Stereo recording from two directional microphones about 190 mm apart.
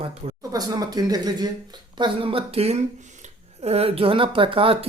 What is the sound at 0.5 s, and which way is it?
Speech, 20° right (ahead or behind).